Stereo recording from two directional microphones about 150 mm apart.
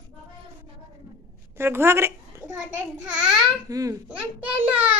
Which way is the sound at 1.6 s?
15° right (ahead or behind).